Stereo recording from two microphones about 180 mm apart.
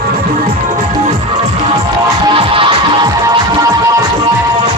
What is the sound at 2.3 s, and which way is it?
Music, 30° right (ahead or behind).